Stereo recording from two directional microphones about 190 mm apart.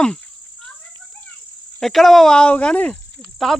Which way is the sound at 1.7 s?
Centre (ahead or behind).